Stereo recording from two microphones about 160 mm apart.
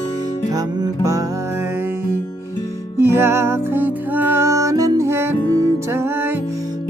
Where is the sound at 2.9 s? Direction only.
15° right (ahead or behind).